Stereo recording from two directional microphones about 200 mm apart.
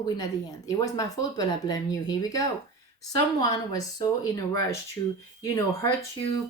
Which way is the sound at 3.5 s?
20° left (ahead or behind).